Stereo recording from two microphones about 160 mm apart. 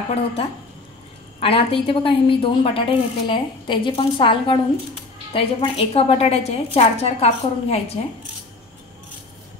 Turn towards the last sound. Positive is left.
turn(degrees=40)  # may be behind; listen again after turning